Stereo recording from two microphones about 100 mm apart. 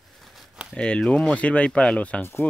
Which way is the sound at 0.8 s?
10° left (ahead or behind).